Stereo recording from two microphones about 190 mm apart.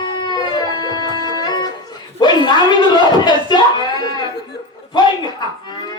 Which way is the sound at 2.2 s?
25° left (ahead or behind).